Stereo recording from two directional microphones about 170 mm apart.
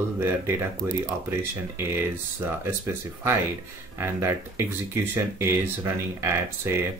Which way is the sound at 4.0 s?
15° right (ahead or behind).